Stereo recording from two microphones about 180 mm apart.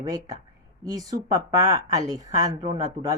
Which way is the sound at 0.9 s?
20° right (ahead or behind).